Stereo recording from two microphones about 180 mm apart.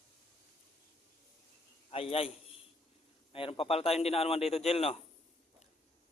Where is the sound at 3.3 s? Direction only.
30° left (ahead or behind).